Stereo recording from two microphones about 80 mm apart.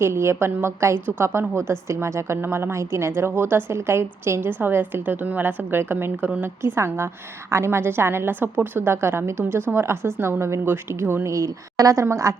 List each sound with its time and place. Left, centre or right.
0.0 s a woman's voice: right
11.3 s a woman's voice: right